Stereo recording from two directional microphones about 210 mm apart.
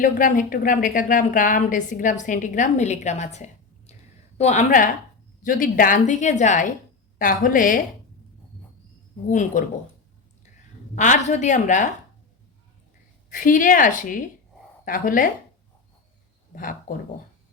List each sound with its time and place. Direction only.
0.0 s a woman's voice: 40° left (ahead or behind)
9.5 s a woman's voice: 35° left (ahead or behind)
10.9 s a woman's voice: 35° left (ahead or behind)
13.3 s a woman's voice: 40° left (ahead or behind)